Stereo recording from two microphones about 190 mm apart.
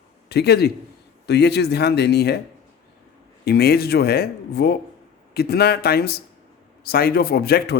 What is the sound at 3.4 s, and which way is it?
A man's voice, 55° left (ahead or behind).